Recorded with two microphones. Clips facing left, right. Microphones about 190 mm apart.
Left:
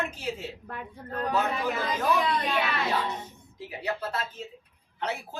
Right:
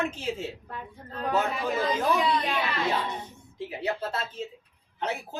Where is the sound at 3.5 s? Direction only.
25° right (ahead or behind).